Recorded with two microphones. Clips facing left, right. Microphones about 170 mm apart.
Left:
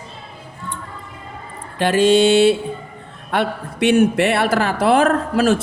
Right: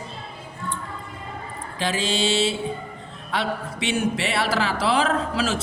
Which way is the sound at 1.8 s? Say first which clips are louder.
Left 11 dB; 60° left (ahead or behind).